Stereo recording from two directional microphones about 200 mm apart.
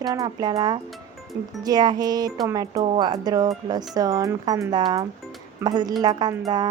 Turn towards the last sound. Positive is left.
turn(degrees=-20)  # may be behind; listen again after turning